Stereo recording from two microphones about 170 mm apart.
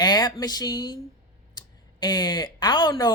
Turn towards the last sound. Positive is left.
turn(degrees=25)  # may be behind; listen again after turning